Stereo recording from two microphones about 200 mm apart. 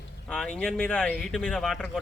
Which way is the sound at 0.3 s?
5° left (ahead or behind).